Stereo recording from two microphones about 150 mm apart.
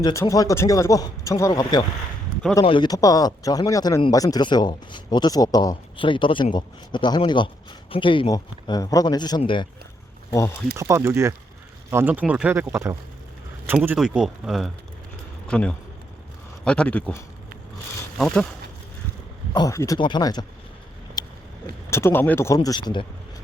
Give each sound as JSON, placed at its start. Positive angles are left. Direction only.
{"t": 0.0, "sound": "speech", "side_deg": 20}
{"t": 10.8, "sound": "speech", "side_deg": -20}
{"t": 13.7, "sound": "speech", "side_deg": -5}
{"t": 19.5, "sound": "speech", "side_deg": 20}
{"t": 21.2, "sound": "vehicle", "side_deg": 25}
{"t": 21.8, "sound": "speech", "side_deg": 15}